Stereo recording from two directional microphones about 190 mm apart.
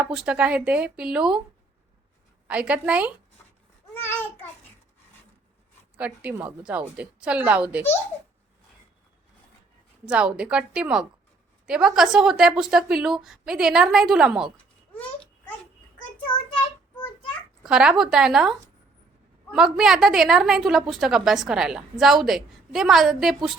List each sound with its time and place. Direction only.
0.0 s a woman's voice: 5° right (ahead or behind)
2.5 s a woman's voice: 5° right (ahead or behind)
4.0 s babbling: 10° left (ahead or behind)
6.0 s a woman's voice: 5° right (ahead or behind)
10.1 s a woman's voice: 5° right (ahead or behind)
14.5 s babbling: 10° left (ahead or behind)
16.2 s child singing: 25° left (ahead or behind)
17.6 s a woman's voice: 5° right (ahead or behind)